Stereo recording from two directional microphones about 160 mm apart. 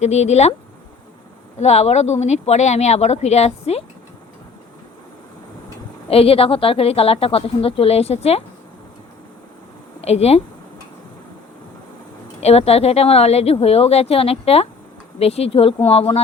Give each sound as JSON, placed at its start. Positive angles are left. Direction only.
{"t": 0.0, "sound": "speech", "side_deg": 45}
{"t": 1.5, "sound": "speech", "side_deg": 45}
{"t": 6.1, "sound": "a woman's voice", "side_deg": 35}
{"t": 10.0, "sound": "a woman's voice", "side_deg": 40}
{"t": 12.4, "sound": "a woman's voice", "side_deg": 40}